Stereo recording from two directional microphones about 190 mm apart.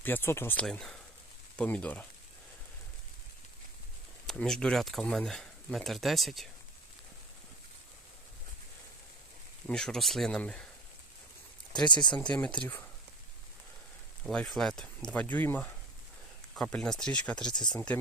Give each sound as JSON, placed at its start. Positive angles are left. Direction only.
{"t": 0.0, "sound": "speech", "side_deg": 10}
{"t": 4.3, "sound": "speech", "side_deg": 5}
{"t": 9.6, "sound": "speech", "side_deg": 5}
{"t": 12.2, "sound": "speech", "side_deg": 5}
{"t": 14.3, "sound": "speech", "side_deg": 5}